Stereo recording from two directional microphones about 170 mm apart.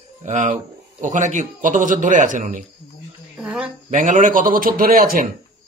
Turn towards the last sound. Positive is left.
turn(degrees=-60)  # may be behind; listen again after turning